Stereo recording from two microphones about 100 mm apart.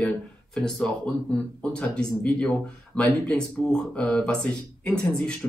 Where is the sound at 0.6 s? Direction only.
5° left (ahead or behind).